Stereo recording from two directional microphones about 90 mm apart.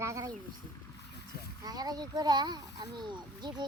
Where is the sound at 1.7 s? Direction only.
50° right (ahead or behind).